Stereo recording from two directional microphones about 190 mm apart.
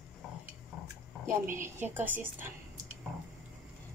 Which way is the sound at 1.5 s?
10° right (ahead or behind).